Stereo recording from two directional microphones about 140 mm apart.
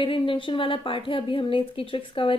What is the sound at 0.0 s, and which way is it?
A woman's voice, 40° left (ahead or behind).